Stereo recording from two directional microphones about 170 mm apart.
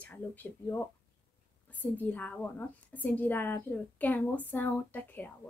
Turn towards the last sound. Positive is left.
turn(degrees=10)  # may be behind; listen again after turning